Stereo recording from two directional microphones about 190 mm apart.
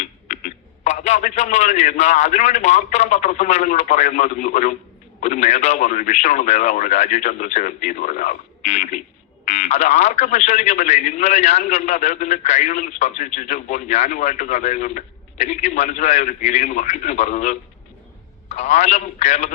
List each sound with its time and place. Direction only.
0.0 s a man's voice: 40° left (ahead or behind)